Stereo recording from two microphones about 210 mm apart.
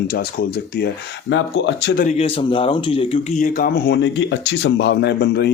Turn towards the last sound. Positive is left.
turn(degrees=50)  # may be behind; listen again after turning